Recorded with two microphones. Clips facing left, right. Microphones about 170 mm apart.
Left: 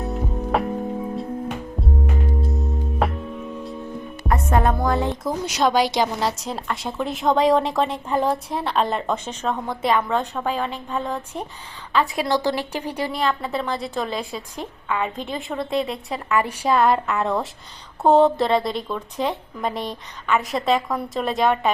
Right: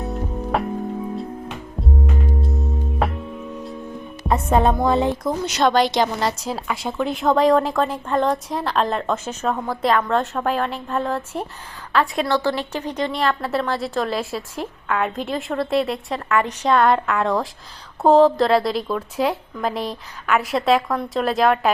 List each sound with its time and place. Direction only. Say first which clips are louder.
0.0 s music: even; centre (ahead or behind)
2.4 s music: even; centre (ahead or behind)
4.3 s music: right 3 dB; 20° right (ahead or behind)
5.2 s a woman's voice: right 2 dB; 5° left (ahead or behind)
12.2 s a woman's voice: right 1 dB; 15° left (ahead or behind); by 21.7 s centre (ahead or behind)